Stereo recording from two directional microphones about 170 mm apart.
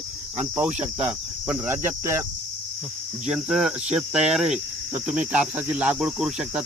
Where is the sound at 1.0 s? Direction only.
10° right (ahead or behind).